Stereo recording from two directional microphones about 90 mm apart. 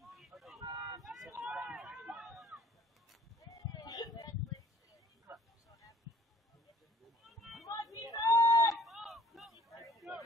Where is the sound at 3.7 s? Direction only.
45° left (ahead or behind).